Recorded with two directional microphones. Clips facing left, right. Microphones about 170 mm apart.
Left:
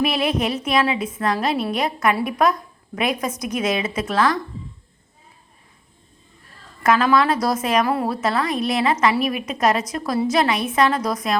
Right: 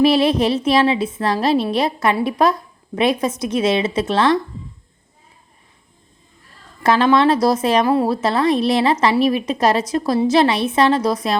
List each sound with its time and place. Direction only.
0.0 s a woman's voice: 30° right (ahead or behind)
6.8 s a woman's voice: 30° right (ahead or behind)